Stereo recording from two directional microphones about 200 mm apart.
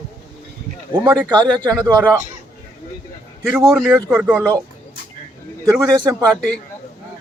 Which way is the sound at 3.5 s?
15° right (ahead or behind).